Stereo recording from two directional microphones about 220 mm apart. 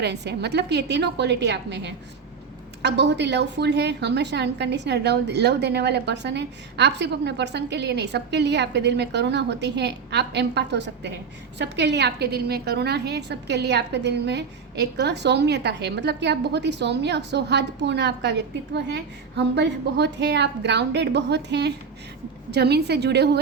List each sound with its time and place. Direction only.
0.0 s a woman's voice: 50° right (ahead or behind)